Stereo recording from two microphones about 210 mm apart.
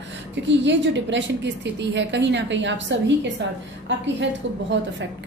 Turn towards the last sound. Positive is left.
turn(degrees=-55)  # may be behind; listen again after turning